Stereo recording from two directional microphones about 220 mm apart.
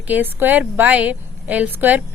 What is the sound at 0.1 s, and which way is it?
A woman's voice, 10° right (ahead or behind).